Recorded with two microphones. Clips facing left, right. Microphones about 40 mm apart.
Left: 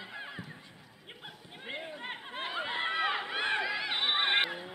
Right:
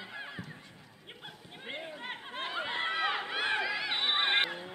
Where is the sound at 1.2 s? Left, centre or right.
Centre.